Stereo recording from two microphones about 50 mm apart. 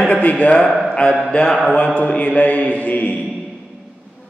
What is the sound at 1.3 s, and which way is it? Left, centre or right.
Speech, centre.